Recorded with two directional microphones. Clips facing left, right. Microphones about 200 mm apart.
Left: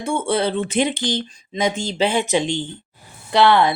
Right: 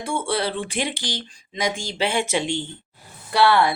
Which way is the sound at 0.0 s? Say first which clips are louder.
Left 4 dB; 25° left (ahead or behind).